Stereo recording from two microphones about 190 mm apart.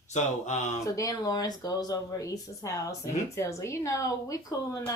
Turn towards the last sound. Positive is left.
turn(degrees=20)  # may be behind; listen again after turning